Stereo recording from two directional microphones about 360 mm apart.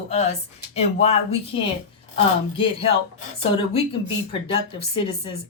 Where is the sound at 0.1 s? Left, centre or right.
Centre.